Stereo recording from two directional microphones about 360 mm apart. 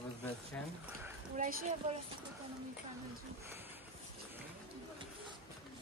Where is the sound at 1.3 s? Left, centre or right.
Right.